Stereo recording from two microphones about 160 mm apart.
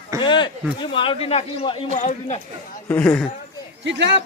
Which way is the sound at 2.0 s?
50° left (ahead or behind).